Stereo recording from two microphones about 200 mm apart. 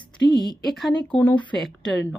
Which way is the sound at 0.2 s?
60° left (ahead or behind).